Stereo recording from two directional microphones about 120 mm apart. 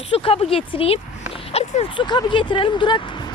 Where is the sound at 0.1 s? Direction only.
50° left (ahead or behind).